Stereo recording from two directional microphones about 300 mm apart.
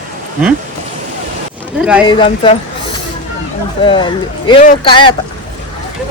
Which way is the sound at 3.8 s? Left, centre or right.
Centre.